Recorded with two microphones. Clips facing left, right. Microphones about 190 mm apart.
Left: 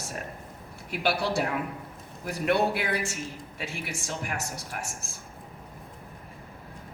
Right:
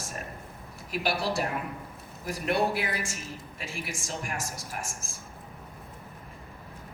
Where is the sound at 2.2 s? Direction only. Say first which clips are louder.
Left 2 dB; 65° left (ahead or behind).